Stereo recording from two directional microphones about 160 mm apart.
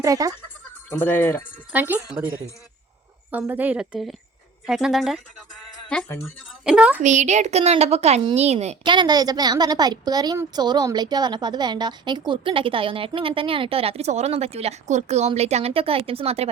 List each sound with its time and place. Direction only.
0.0 s speech: 20° right (ahead or behind)
0.9 s speech: 10° left (ahead or behind)
1.7 s a woman's voice: 10° right (ahead or behind)
6.7 s a woman's voice: 5° right (ahead or behind)
7.0 s a child's voice: 50° right (ahead or behind)
8.8 s a woman's voice: 30° right (ahead or behind)